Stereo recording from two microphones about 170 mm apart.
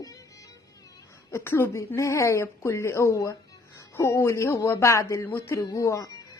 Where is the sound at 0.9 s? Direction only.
15° left (ahead or behind).